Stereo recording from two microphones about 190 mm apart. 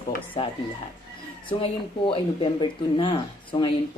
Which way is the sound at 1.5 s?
25° left (ahead or behind).